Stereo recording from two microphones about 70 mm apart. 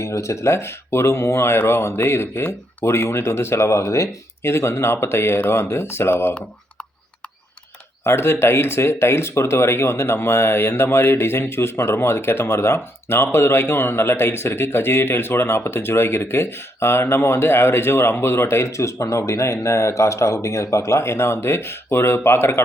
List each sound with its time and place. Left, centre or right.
0.0 s speech: left
8.0 s speech: left